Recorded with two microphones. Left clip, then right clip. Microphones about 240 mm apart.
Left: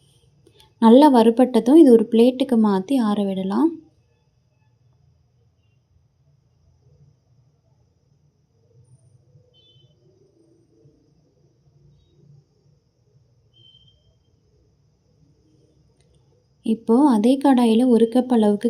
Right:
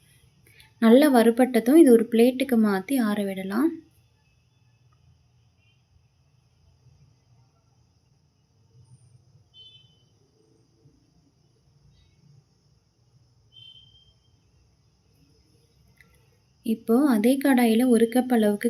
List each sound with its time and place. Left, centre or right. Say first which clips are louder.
0.8 s a woman's voice: left 5 dB; left
16.6 s a woman's voice: left 5 dB; left